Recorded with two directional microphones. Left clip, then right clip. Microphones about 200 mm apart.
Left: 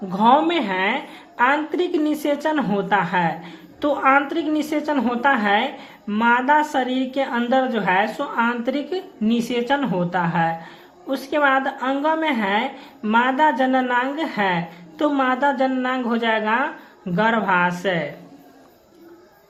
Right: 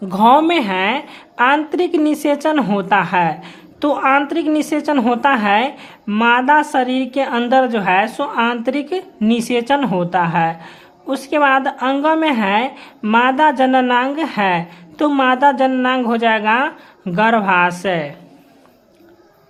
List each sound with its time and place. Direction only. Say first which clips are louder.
0.1 s a woman's voice: right 5 dB; 40° right (ahead or behind)